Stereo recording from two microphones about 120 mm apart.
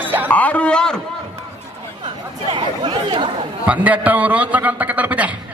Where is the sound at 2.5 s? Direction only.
45° right (ahead or behind).